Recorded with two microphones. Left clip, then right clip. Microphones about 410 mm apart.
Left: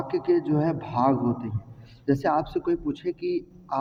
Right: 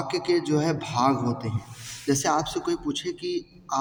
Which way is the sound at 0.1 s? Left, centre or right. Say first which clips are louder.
Left 1 dB; left.